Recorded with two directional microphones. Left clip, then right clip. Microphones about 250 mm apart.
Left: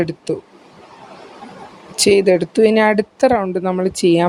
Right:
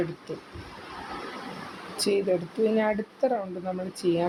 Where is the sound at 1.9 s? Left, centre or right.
Left.